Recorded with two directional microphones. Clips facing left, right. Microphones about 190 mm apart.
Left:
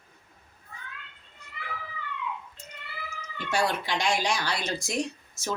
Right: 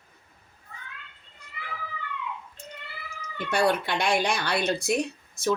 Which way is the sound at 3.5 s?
60° right (ahead or behind).